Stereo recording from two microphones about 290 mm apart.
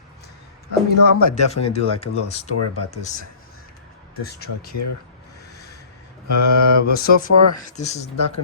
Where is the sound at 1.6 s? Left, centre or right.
Left.